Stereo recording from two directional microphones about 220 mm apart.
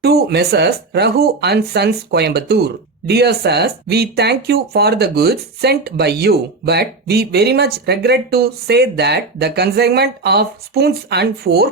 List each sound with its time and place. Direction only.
0.0 s speech: 45° right (ahead or behind)